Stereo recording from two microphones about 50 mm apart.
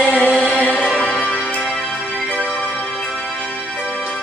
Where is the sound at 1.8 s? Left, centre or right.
Centre.